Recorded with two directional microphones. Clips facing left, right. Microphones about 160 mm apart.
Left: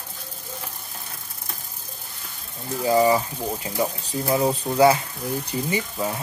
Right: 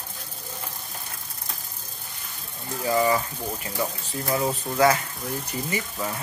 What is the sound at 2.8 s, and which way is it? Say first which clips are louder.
Speech: left 4 dB; 20° left (ahead or behind).